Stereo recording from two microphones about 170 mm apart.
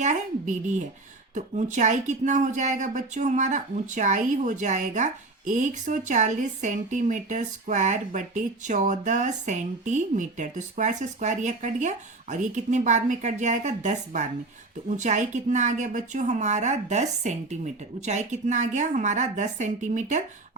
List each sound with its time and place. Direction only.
0.0 s speech: 45° right (ahead or behind)